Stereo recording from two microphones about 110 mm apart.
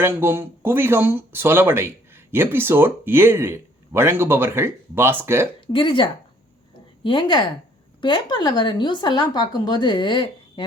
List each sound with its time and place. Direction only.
0.0 s speech: 20° right (ahead or behind)
5.5 s speech: 50° left (ahead or behind)